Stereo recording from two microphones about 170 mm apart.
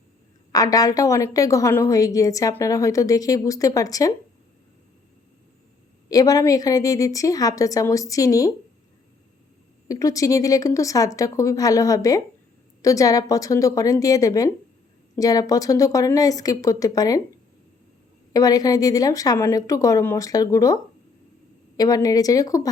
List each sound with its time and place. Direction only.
0.5 s a woman's voice: 20° left (ahead or behind)
6.1 s a woman's voice: 20° left (ahead or behind)
9.9 s a woman's voice: 20° left (ahead or behind)
18.3 s a woman's voice: 20° left (ahead or behind)
21.8 s a woman's voice: 20° left (ahead or behind)